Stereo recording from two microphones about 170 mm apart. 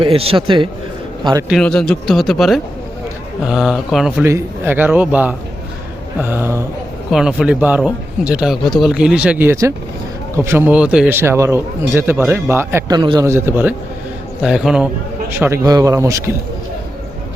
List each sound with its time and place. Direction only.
0.0 s a man's voice: 35° right (ahead or behind)
1.5 s speech: 5° left (ahead or behind)
4.2 s a man's voice: 15° right (ahead or behind)
7.1 s a man's voice: 5° right (ahead or behind)
13.0 s a man's voice: 30° right (ahead or behind)
13.2 s a man's voice: 15° right (ahead or behind)
15.4 s a man's voice: 15° right (ahead or behind)